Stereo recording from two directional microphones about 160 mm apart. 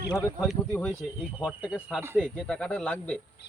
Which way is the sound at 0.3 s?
5° left (ahead or behind).